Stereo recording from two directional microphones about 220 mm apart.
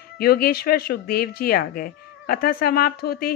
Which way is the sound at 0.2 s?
45° left (ahead or behind).